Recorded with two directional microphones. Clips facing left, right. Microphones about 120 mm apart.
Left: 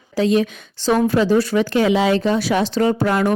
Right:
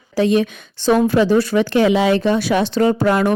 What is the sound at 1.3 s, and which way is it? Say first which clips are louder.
Speech: right 1 dB; 60° right (ahead or behind).